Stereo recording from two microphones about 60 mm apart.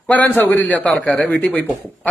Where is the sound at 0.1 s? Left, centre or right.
Left.